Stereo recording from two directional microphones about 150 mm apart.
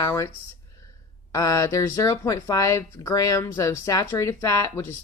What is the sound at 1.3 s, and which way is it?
Speech, 20° left (ahead or behind).